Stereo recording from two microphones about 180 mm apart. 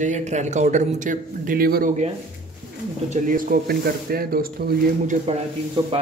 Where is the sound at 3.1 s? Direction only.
50° right (ahead or behind).